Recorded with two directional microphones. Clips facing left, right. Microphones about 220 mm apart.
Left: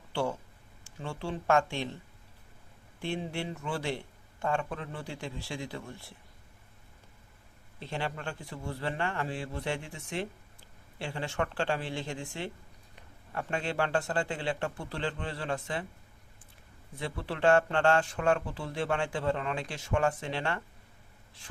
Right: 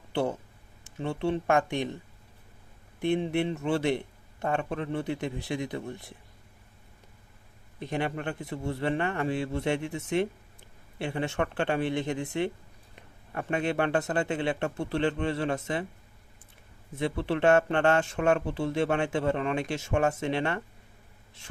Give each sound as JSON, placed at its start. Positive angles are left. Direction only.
{"t": 0.1, "sound": "speech", "side_deg": -20}
{"t": 0.9, "sound": "a sound", "side_deg": -20}
{"t": 1.2, "sound": "speech", "side_deg": -20}
{"t": 3.0, "sound": "a man's voice", "side_deg": -20}
{"t": 7.8, "sound": "a man's voice", "side_deg": -15}
{"t": 17.2, "sound": "a man's voice", "side_deg": -20}